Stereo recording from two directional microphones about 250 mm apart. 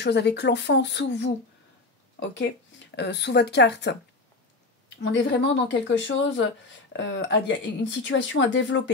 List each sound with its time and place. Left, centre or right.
0.0 s speech: left
5.0 s speech: left